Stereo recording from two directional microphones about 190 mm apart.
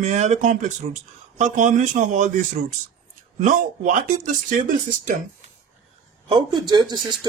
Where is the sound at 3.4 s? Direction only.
45° right (ahead or behind).